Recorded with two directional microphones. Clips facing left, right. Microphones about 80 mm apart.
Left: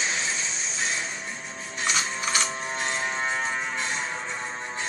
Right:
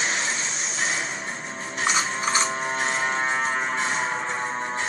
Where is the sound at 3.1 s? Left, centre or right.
Right.